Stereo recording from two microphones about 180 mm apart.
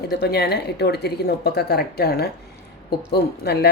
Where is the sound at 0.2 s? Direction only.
60° left (ahead or behind).